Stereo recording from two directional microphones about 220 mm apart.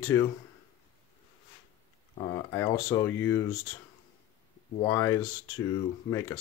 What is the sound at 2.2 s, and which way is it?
Speech, 15° left (ahead or behind).